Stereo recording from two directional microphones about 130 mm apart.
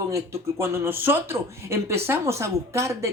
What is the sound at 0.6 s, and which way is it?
A woman's voice, 15° right (ahead or behind).